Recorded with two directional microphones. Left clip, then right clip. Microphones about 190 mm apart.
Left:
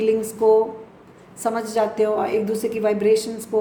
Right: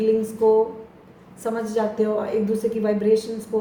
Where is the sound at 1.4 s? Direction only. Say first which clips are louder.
Left 3 dB; 65° left (ahead or behind).